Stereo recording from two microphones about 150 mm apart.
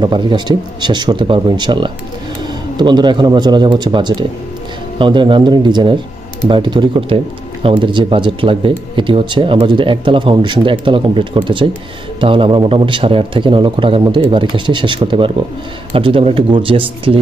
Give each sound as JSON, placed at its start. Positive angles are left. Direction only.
{"t": 0.0, "sound": "speech", "side_deg": -30}